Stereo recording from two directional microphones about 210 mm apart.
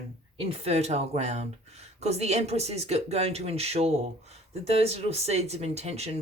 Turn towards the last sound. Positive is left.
turn(degrees=-30)  # may be behind; listen again after turning